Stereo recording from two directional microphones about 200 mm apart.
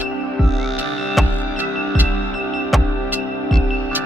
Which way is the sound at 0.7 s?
10° right (ahead or behind).